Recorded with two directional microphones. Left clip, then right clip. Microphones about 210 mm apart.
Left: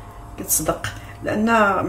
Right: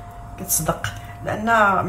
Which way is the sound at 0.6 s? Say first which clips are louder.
Even; 40° left (ahead or behind).